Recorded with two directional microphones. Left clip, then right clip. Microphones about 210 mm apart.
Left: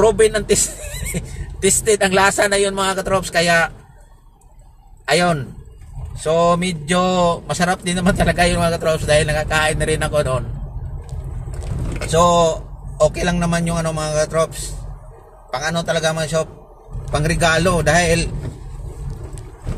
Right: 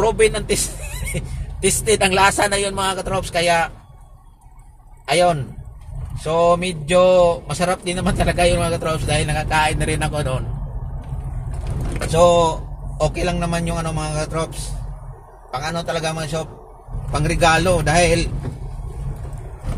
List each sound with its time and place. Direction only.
0.0 s speech: 25° left (ahead or behind)
6.2 s speech: 30° left (ahead or behind)
12.1 s speech: 25° left (ahead or behind)
15.6 s speech: 30° left (ahead or behind)